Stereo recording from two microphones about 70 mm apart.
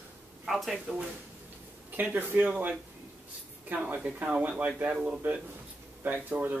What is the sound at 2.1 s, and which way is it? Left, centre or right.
Speech, right.